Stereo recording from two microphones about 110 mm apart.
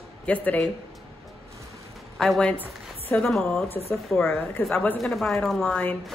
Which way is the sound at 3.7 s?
25° left (ahead or behind).